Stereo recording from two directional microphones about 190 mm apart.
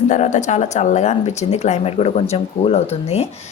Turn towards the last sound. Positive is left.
turn(degrees=35)  # may be behind; listen again after turning